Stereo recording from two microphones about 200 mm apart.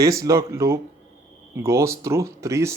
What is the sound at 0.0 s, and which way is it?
Speech, 15° right (ahead or behind).